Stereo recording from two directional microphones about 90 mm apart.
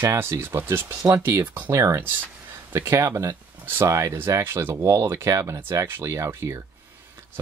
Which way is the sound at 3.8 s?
35° right (ahead or behind).